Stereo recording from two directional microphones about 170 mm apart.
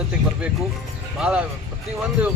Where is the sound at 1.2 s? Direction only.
5° right (ahead or behind).